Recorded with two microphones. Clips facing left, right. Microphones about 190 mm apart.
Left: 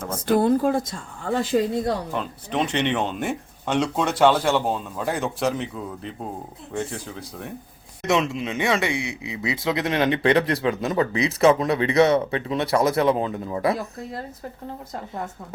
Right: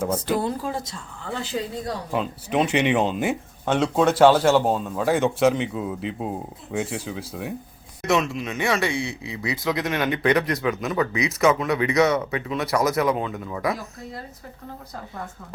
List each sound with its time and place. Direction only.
0.3 s speech: 50° left (ahead or behind)
2.1 s speech: 5° right (ahead or behind)
8.0 s speech: 25° left (ahead or behind)